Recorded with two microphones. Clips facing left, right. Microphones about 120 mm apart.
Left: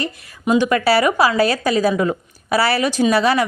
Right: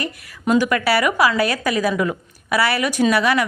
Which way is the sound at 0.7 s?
30° left (ahead or behind).